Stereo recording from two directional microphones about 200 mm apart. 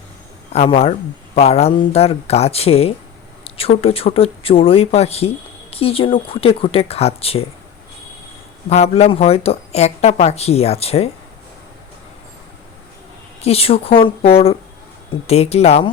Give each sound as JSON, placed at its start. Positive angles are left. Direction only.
{"t": 0.5, "sound": "speech", "side_deg": 30}
{"t": 8.7, "sound": "speech", "side_deg": 30}
{"t": 13.4, "sound": "speech", "side_deg": 30}